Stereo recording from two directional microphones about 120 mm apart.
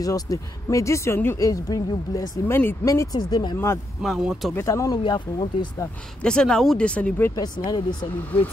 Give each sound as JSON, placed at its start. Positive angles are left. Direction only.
{"t": 0.0, "sound": "speech", "side_deg": 30}
{"t": 3.5, "sound": "speech", "side_deg": 20}
{"t": 4.0, "sound": "speech", "side_deg": -5}
{"t": 4.6, "sound": "speech", "side_deg": 25}
{"t": 5.0, "sound": "speech", "side_deg": 40}
{"t": 6.2, "sound": "speech", "side_deg": 5}
{"t": 7.3, "sound": "speech", "side_deg": 35}